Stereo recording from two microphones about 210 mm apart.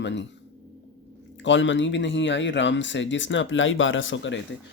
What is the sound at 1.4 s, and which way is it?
Speech, 60° left (ahead or behind).